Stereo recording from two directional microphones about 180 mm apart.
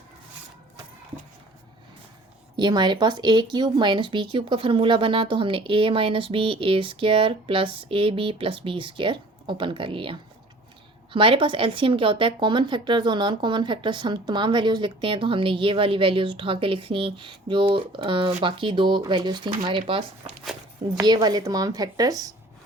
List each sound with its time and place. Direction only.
2.6 s speech: 25° right (ahead or behind)